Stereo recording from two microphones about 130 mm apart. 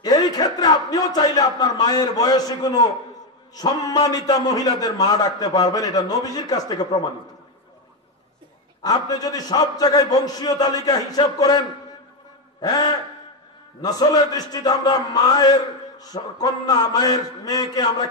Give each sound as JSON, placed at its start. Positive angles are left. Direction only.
{"t": 0.0, "sound": "a sound", "side_deg": 30}
{"t": 3.5, "sound": "a man's voice", "side_deg": 30}
{"t": 8.8, "sound": "a man's voice", "side_deg": 30}
{"t": 12.6, "sound": "a man's voice", "side_deg": 30}